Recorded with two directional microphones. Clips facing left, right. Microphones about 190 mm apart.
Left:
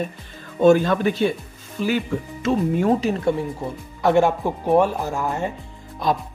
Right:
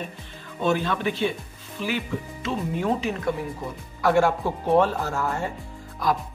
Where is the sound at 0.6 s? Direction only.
45° left (ahead or behind).